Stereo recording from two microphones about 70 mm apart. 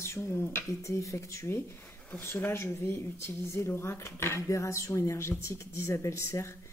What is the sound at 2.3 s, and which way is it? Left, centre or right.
Speech, left.